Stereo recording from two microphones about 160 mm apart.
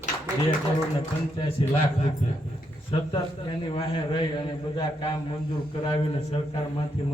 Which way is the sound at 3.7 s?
35° left (ahead or behind).